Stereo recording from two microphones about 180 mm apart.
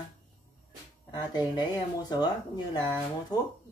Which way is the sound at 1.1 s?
25° left (ahead or behind).